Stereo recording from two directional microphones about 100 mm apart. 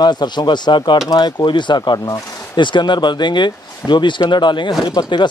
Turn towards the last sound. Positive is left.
turn(degrees=50)  # may be behind; listen again after turning